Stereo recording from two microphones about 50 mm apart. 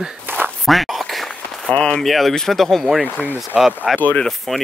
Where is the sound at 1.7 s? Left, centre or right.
Centre.